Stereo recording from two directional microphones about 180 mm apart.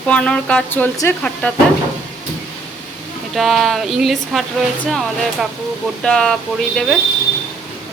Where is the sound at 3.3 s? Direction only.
Centre (ahead or behind).